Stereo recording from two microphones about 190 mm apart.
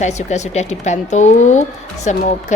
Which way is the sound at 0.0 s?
35° left (ahead or behind).